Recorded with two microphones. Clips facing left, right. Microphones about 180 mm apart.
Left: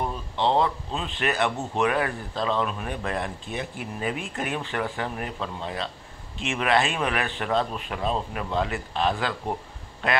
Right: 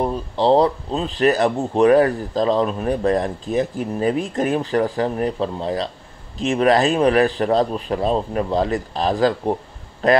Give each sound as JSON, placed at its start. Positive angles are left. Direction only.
{"t": 0.0, "sound": "speech", "side_deg": -35}